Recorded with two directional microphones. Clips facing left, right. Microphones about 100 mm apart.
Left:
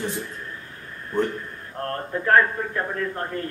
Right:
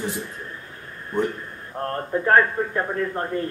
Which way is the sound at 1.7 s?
20° right (ahead or behind).